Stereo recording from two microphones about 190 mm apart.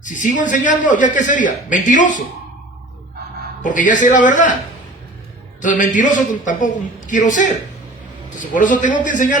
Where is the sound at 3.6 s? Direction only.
40° left (ahead or behind).